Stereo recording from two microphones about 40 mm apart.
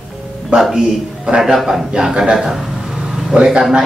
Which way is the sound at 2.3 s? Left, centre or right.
Centre.